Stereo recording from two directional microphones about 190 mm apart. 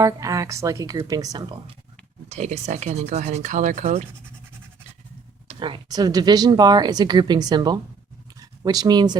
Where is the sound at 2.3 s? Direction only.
40° right (ahead or behind).